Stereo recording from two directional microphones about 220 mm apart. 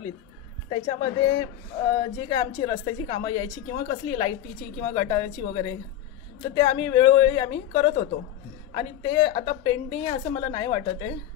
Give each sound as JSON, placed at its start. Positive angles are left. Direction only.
{"t": 0.7, "sound": "a woman's voice", "side_deg": 25}